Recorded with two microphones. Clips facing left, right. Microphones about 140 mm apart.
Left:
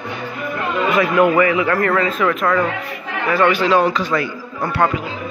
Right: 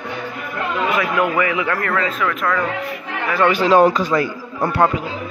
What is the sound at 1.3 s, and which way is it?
Speech, 10° right (ahead or behind).